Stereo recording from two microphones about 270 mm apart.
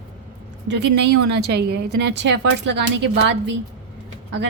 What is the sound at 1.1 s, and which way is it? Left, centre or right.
Speech, right.